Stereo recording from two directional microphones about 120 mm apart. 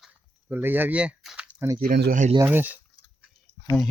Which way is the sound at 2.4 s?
15° right (ahead or behind).